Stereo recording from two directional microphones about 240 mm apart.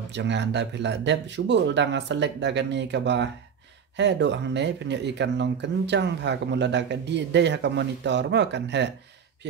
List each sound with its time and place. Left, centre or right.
0.1 s speech: right